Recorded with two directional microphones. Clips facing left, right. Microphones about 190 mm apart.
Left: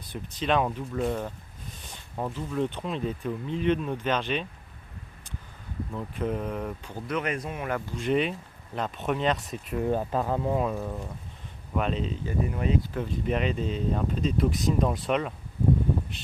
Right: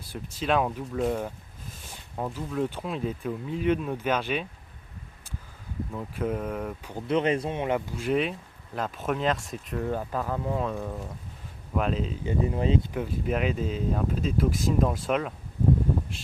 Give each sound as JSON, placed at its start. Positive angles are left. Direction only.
{"t": 0.0, "sound": "speech", "side_deg": -5}
{"t": 5.9, "sound": "speech", "side_deg": 0}
{"t": 6.9, "sound": "speech", "side_deg": -30}
{"t": 7.9, "sound": "speech", "side_deg": 0}
{"t": 9.7, "sound": "speech", "side_deg": 20}
{"t": 10.6, "sound": "speech", "side_deg": 5}
{"t": 12.2, "sound": "speech", "side_deg": -25}
{"t": 12.9, "sound": "speech", "side_deg": -10}